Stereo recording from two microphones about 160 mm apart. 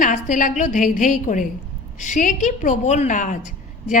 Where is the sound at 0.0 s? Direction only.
55° left (ahead or behind).